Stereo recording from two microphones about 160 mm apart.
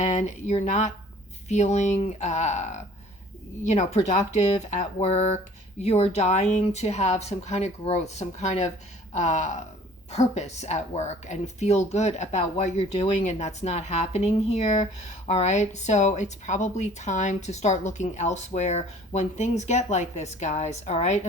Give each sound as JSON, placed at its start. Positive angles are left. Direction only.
{"t": 0.0, "sound": "speech", "side_deg": 50}